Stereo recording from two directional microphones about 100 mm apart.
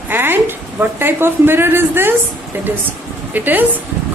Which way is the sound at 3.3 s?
20° right (ahead or behind).